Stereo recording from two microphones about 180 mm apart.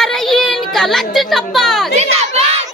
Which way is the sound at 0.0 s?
Centre (ahead or behind).